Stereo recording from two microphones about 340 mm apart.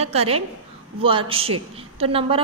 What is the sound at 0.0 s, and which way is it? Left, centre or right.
A woman's voice, centre.